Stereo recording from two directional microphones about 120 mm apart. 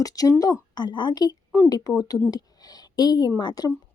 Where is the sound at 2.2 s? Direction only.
35° left (ahead or behind).